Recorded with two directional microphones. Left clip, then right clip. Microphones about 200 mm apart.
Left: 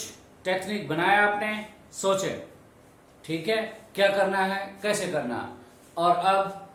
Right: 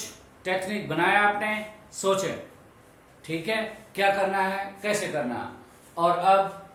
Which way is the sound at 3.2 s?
Centre (ahead or behind).